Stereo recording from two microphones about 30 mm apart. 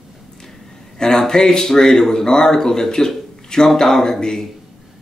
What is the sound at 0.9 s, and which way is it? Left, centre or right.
Speech, centre.